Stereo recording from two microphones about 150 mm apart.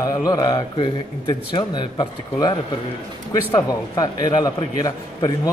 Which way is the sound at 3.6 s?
25° left (ahead or behind).